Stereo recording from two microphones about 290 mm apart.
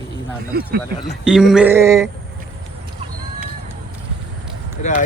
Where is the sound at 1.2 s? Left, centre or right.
Centre.